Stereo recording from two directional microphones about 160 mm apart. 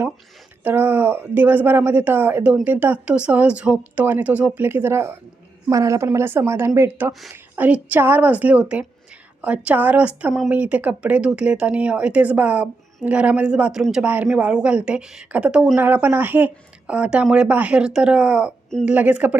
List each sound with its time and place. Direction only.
0.6 s a woman's voice: 10° right (ahead or behind)